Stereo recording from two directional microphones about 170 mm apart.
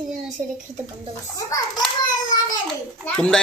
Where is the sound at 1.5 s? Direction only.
25° left (ahead or behind).